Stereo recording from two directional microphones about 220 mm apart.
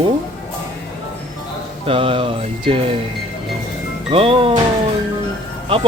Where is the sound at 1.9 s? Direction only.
25° right (ahead or behind).